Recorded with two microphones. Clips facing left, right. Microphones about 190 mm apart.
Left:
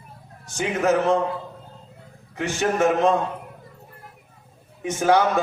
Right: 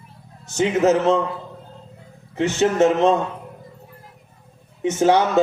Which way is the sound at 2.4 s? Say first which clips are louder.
Right 4 dB; 25° right (ahead or behind).